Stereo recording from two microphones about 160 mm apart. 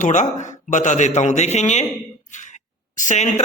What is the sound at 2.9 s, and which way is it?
Speech, 50° left (ahead or behind).